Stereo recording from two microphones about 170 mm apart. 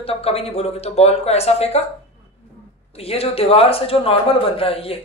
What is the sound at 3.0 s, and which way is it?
Speech, 35° left (ahead or behind).